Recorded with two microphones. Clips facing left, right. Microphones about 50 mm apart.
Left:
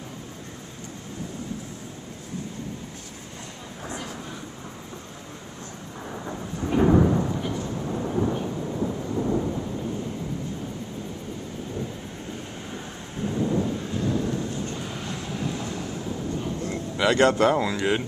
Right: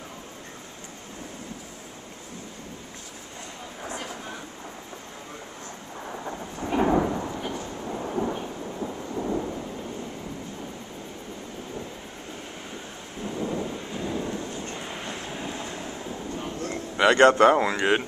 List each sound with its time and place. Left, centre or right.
6.0 s thunder: centre
7.1 s a sound: centre
7.8 s thunder: centre
13.2 s thunder: centre
14.7 s thunder: right
16.3 s a sound: right
16.9 s speech: right